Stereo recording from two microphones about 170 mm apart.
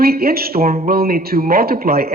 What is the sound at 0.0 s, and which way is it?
A man's voice, 60° right (ahead or behind).